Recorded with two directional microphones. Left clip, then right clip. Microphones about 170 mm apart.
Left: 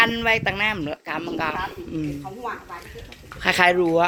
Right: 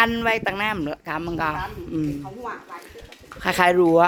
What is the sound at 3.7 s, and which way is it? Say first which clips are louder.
Speech: right 3 dB; 25° right (ahead or behind).